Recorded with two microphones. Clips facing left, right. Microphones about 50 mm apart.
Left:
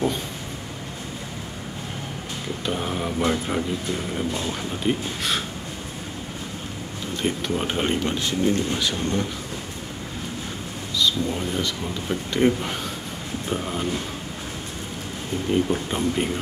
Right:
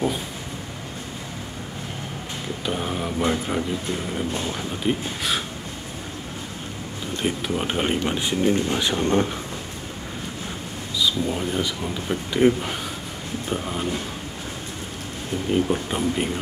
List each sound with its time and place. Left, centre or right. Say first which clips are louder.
2.6 s speech: even; centre
7.2 s speech: even; centre; by 9.3 s right
11.0 s speech: even; centre
15.5 s speech: even; centre